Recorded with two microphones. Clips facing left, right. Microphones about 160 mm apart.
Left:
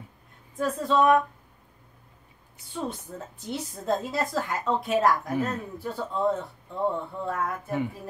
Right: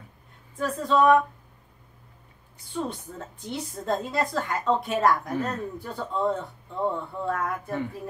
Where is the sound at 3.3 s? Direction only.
Centre (ahead or behind).